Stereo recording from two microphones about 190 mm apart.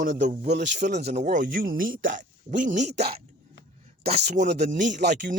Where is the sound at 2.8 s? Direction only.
60° right (ahead or behind).